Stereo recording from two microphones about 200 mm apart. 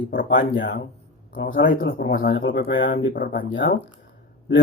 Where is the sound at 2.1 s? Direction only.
85° left; by 3.7 s 65° left (ahead or behind).